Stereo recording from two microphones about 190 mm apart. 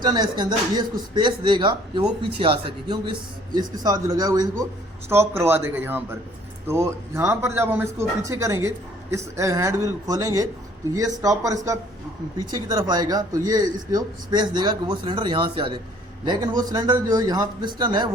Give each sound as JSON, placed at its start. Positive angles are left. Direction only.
{"t": 0.0, "sound": "speech", "side_deg": -20}